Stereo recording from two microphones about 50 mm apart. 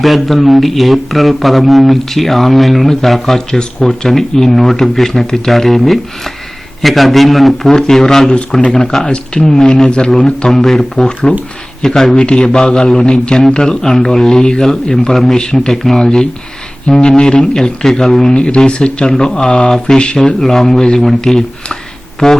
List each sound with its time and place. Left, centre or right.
0.0 s a man's voice: centre